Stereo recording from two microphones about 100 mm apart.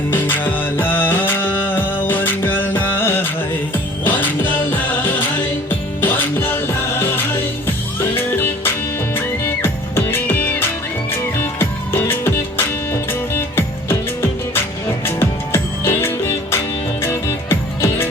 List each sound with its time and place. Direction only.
0.1 s music: 20° left (ahead or behind)
6.0 s music: 20° left (ahead or behind)
8.1 s music: 25° left (ahead or behind)